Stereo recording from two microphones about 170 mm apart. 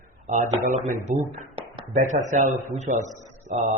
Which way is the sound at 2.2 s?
50° right (ahead or behind).